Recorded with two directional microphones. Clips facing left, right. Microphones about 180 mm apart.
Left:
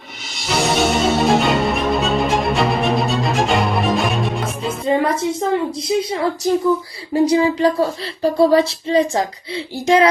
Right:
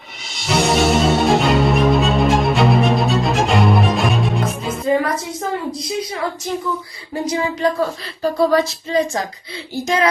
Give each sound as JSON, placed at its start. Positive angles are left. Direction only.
{"t": 0.3, "sound": "music", "side_deg": 0}
{"t": 4.9, "sound": "a sound", "side_deg": 25}
{"t": 6.0, "sound": "speech", "side_deg": 30}